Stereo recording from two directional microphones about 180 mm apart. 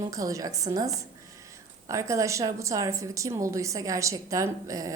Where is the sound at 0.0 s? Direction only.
20° right (ahead or behind).